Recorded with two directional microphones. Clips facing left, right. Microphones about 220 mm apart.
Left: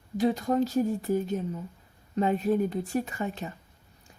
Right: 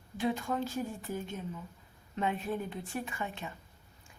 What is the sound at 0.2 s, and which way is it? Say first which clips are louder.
Speech: left 8 dB; 40° left (ahead or behind).